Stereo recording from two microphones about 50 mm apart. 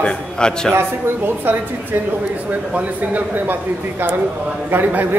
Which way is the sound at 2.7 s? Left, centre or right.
Right.